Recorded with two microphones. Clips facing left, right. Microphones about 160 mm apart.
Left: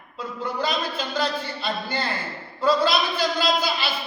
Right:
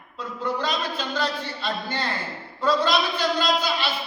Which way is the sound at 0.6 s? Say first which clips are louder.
Left 1 dB; 10° left (ahead or behind).